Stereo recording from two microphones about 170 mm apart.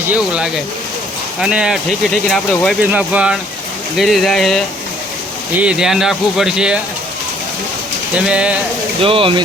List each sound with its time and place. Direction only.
0.1 s speech: 5° right (ahead or behind)
8.3 s speech: 5° right (ahead or behind)
9.0 s speech: 30° right (ahead or behind)